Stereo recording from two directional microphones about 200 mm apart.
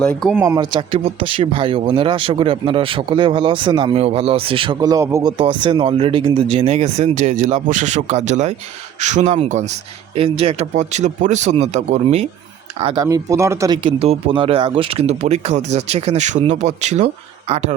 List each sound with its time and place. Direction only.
0.0 s speech: 5° left (ahead or behind)
0.3 s speech: 15° right (ahead or behind); by 12.2 s 35° right (ahead or behind)
12.8 s speech: 20° right (ahead or behind)